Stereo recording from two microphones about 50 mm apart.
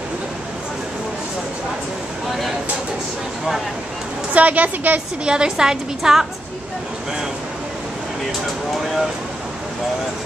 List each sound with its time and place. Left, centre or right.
4.3 s a woman's voice: right
5.2 s a woman's voice: centre